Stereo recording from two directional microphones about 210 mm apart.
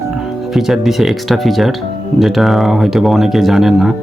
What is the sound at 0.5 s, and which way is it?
Speech, centre (ahead or behind).